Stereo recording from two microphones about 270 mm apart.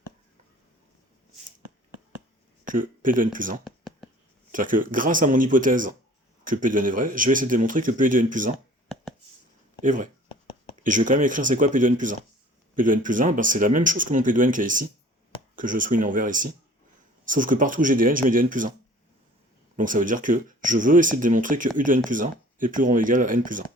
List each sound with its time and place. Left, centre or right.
2.6 s a man's voice: right
3.6 s a sound: centre
4.5 s a man's voice: right
9.8 s a man's voice: right
19.7 s a man's voice: right